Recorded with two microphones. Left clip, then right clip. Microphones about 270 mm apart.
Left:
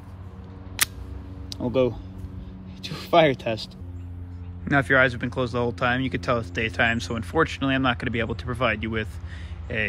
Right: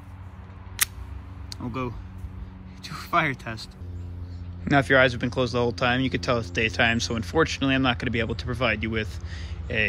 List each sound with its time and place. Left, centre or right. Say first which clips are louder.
1.6 s speech: left 10 dB; left
4.6 s speech: even; centre